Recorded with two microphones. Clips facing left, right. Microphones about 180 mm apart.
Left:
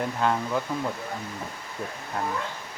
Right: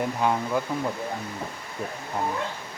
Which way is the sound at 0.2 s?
10° right (ahead or behind).